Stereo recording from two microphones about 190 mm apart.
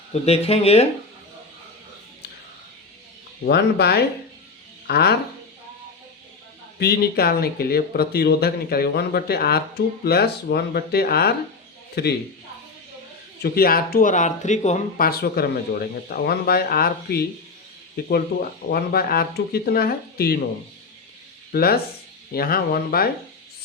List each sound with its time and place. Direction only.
0.1 s speech: 35° left (ahead or behind)
3.4 s speech: 60° left (ahead or behind)
6.7 s speech: 55° left (ahead or behind)
13.4 s speech: 50° left (ahead or behind)
21.5 s speech: 55° left (ahead or behind)